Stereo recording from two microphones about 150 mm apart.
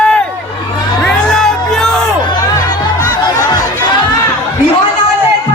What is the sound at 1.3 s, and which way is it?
Music, centre (ahead or behind).